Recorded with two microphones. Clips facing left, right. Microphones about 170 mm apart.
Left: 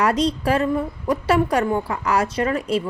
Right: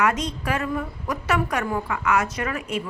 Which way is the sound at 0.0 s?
35° left (ahead or behind).